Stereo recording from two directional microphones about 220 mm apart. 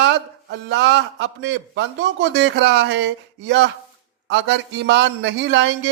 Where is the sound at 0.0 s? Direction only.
55° right (ahead or behind).